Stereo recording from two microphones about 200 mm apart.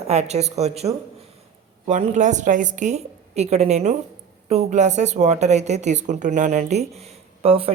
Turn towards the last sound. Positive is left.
turn(degrees=-30)  # may be behind; listen again after turning